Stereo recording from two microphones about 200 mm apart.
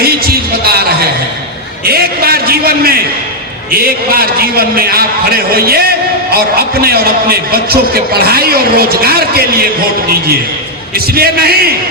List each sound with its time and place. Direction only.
0.0 s music: 50° right (ahead or behind)
1.8 s a man's voice: 50° right (ahead or behind)
10.9 s a man's voice: 50° right (ahead or behind)